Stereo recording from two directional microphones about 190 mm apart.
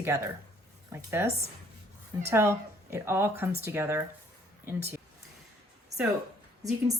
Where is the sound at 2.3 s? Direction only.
15° right (ahead or behind).